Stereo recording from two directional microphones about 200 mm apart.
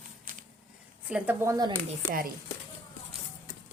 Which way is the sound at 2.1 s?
45° right (ahead or behind).